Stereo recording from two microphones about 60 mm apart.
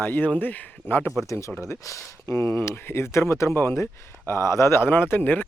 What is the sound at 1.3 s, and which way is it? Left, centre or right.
Speech, left.